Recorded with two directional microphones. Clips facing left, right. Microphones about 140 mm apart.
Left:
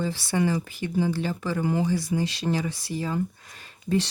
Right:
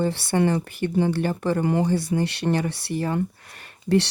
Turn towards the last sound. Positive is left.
turn(degrees=-70)  # may be behind; listen again after turning